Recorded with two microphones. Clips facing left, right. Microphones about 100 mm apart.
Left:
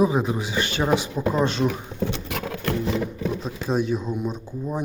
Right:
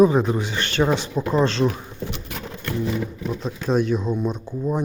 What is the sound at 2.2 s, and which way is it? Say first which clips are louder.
Patter: left 4 dB; 85° left.